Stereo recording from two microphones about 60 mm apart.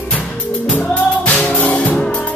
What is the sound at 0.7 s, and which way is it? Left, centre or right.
Music, left.